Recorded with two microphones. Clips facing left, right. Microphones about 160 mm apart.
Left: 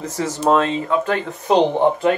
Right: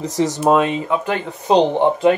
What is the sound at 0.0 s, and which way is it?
Speech, 15° right (ahead or behind).